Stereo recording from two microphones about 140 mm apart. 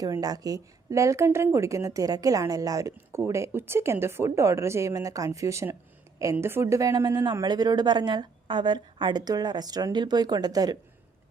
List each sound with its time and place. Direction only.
0.0 s a woman's voice: 25° right (ahead or behind)